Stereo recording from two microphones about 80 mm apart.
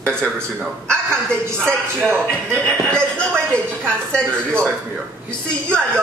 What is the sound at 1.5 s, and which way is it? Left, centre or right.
Speech, centre.